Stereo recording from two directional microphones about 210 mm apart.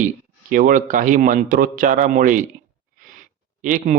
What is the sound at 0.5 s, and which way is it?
Speech, 40° right (ahead or behind).